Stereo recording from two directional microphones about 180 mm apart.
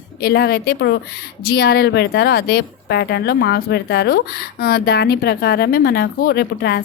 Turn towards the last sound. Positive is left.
turn(degrees=65)  # may be behind; listen again after turning